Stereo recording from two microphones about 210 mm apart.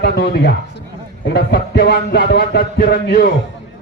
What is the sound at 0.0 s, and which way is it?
Music, 55° left (ahead or behind).